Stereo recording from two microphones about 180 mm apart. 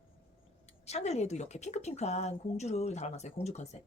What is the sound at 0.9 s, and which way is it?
Speech, 40° left (ahead or behind).